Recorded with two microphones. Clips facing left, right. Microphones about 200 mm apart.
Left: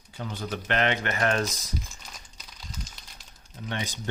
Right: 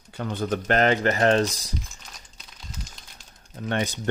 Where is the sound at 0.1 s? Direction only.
60° right (ahead or behind); by 1.7 s 30° right (ahead or behind).